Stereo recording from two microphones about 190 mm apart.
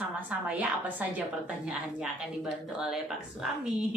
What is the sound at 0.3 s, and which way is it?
Speech, 10° right (ahead or behind).